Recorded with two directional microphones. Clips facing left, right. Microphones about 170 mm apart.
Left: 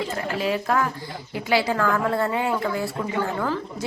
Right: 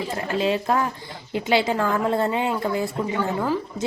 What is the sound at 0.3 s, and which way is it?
A woman's voice, 25° right (ahead or behind).